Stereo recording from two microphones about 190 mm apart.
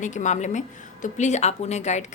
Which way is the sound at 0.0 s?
40° left (ahead or behind).